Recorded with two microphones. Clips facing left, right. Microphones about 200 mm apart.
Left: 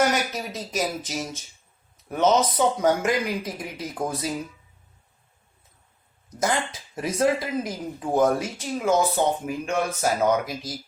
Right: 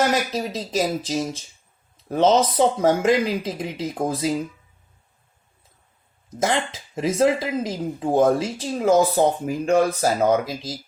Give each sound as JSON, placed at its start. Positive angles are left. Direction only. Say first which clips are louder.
{"t": 0.1, "sound": "speech", "louder": "right 4 dB", "side_deg": -30}
{"t": 6.3, "sound": "speech", "louder": "right 3 dB", "side_deg": -25}